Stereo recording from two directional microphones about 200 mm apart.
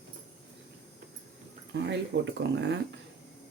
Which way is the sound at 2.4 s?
60° right (ahead or behind).